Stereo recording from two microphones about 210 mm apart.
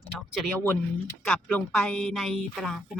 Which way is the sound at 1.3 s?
5° left (ahead or behind).